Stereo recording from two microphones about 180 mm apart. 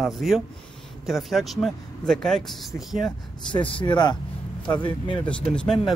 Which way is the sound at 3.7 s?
25° left (ahead or behind).